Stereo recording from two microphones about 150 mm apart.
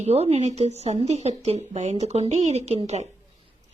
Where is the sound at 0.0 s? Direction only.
45° right (ahead or behind).